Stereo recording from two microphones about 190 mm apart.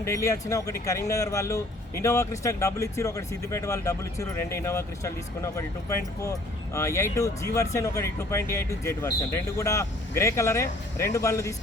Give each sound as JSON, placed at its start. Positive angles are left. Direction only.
{"t": 0.0, "sound": "speech", "side_deg": 15}